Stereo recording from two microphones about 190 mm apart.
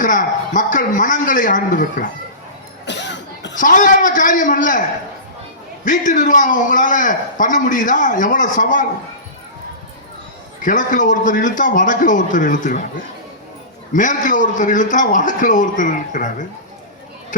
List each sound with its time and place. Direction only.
0.0 s a man's voice: 45° left (ahead or behind)
2.8 s cough: 65° left (ahead or behind)
3.6 s a man's voice: 45° left (ahead or behind)
5.8 s a man's voice: 40° left (ahead or behind)
10.6 s a man's voice: 45° left (ahead or behind)
13.9 s a man's voice: 40° left (ahead or behind)